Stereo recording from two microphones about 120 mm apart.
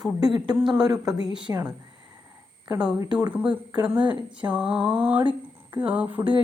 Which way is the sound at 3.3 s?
10° right (ahead or behind).